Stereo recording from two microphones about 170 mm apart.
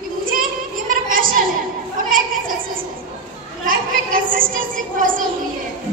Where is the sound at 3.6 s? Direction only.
55° right (ahead or behind).